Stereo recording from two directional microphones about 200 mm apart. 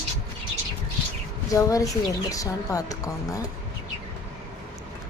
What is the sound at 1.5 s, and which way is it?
A woman's voice, 15° left (ahead or behind).